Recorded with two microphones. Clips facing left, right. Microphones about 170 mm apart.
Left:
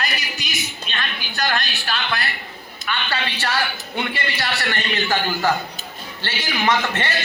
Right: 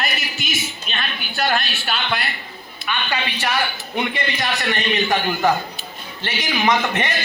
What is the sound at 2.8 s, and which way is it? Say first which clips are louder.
A man's voice: right 1 dB; 15° right (ahead or behind).